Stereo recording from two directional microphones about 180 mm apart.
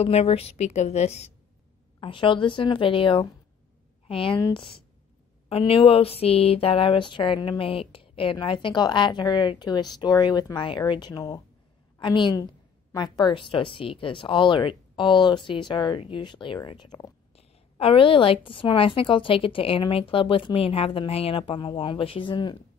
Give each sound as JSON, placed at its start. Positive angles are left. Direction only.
{"t": 0.0, "sound": "a woman's voice", "side_deg": 35}